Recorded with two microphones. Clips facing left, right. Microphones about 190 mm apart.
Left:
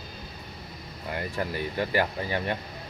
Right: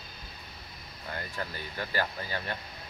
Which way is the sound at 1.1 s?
20° left (ahead or behind).